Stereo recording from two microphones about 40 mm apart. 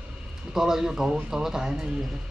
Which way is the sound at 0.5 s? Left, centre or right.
Centre.